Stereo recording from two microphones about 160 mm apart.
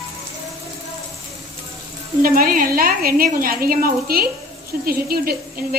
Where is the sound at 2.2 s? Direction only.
65° right (ahead or behind).